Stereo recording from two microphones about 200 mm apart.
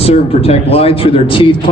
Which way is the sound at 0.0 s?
30° left (ahead or behind).